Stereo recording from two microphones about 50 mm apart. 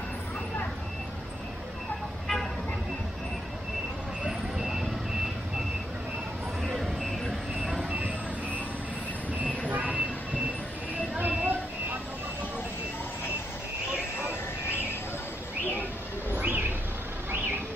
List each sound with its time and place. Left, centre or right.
4.3 s vehicle: centre
6.7 s a sound: centre
7.9 s vehicle: right
9.7 s vehicle: right
11.1 s vehicle: right
16.3 s bird: right